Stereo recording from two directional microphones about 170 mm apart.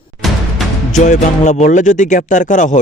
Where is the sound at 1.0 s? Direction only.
45° left (ahead or behind).